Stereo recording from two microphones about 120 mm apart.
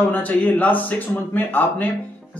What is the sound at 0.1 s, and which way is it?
A man's voice, 15° left (ahead or behind).